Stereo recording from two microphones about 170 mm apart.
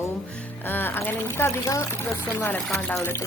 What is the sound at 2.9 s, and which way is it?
Speech, 15° left (ahead or behind).